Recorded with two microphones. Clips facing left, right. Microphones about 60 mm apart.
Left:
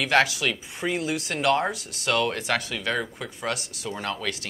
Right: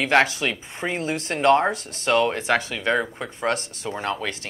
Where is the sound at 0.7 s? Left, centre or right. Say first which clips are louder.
Right 1 dB; right.